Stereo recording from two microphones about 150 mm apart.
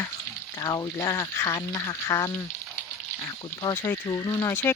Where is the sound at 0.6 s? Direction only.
25° left (ahead or behind).